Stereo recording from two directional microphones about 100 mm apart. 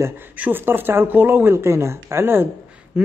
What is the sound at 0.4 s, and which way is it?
A man's voice, 20° right (ahead or behind).